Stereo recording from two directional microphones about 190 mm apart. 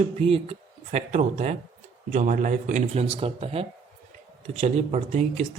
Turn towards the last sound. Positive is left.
turn(degrees=-35)  # may be behind; listen again after turning